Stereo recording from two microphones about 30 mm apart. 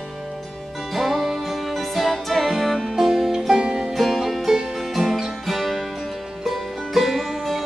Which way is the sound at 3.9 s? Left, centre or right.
Centre.